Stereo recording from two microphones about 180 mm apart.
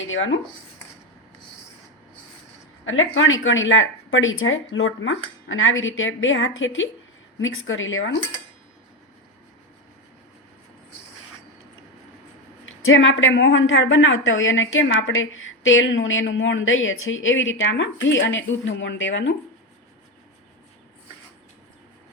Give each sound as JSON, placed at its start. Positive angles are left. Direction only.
{"t": 0.1, "sound": "a woman's voice", "side_deg": 90}
{"t": 2.8, "sound": "a woman's voice", "side_deg": 90}
{"t": 12.6, "sound": "a woman's voice", "side_deg": 90}